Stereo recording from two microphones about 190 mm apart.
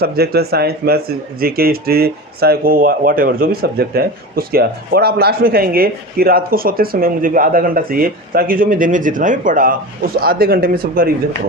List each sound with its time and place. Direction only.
0.0 s speech: 55° right (ahead or behind)